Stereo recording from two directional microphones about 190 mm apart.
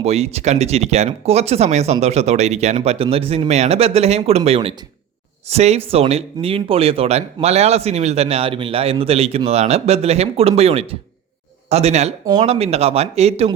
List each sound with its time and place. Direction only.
0.0 s speech: 35° right (ahead or behind)